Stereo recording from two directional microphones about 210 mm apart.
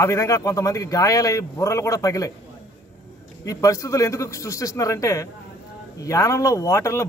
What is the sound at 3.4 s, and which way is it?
A man's voice, 15° left (ahead or behind).